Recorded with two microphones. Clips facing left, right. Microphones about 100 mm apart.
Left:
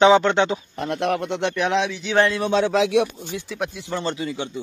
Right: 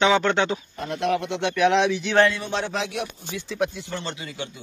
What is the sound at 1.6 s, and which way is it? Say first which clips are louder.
Speech: right 3 dB; centre (ahead or behind).